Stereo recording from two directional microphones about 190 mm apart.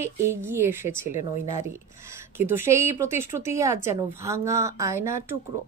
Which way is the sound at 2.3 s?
10° right (ahead or behind).